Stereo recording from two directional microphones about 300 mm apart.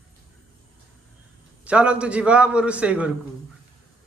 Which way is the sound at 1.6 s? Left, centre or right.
Centre.